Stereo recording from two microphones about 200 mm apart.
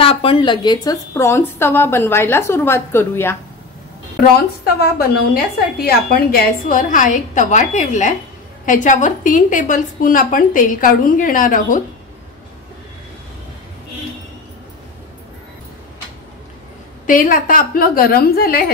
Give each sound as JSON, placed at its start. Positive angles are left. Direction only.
{"t": 0.0, "sound": "a woman's voice", "side_deg": 25}
{"t": 4.4, "sound": "a woman's voice", "side_deg": 55}
{"t": 17.0, "sound": "a woman's voice", "side_deg": 40}